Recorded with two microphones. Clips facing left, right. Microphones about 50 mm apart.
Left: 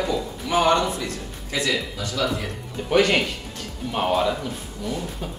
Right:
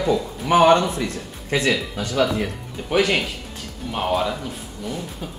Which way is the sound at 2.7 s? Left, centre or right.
Centre.